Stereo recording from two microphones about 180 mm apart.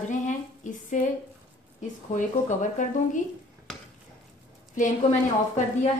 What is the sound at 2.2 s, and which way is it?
A woman's voice, 45° left (ahead or behind).